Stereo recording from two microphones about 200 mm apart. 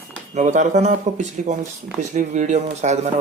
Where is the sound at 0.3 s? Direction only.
35° right (ahead or behind).